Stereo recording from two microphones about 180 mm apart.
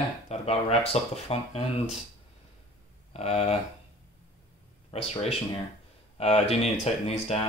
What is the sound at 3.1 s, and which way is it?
Speech, 35° left (ahead or behind).